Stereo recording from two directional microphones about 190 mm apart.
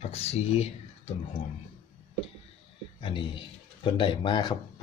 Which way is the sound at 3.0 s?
25° left (ahead or behind).